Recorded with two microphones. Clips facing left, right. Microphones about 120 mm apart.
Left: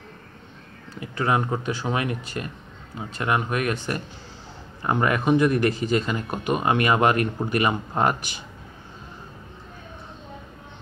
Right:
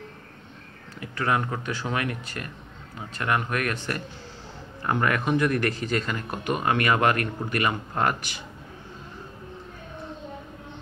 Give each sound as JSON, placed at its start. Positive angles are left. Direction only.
{"t": 0.9, "sound": "speech", "side_deg": 20}